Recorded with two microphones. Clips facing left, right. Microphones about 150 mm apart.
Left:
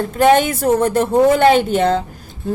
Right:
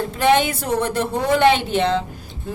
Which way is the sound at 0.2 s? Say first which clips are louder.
Left 5 dB; 45° left (ahead or behind).